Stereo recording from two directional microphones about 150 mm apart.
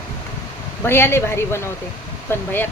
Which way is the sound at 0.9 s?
15° left (ahead or behind).